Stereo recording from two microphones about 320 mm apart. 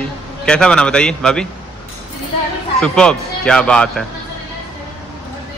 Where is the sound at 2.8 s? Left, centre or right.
Centre.